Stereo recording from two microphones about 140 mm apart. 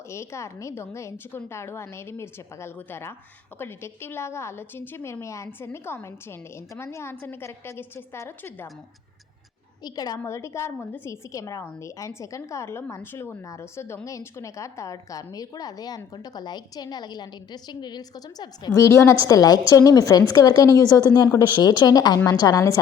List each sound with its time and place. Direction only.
0.1 s a woman's voice: 20° left (ahead or behind)
9.8 s a woman's voice: 30° left (ahead or behind)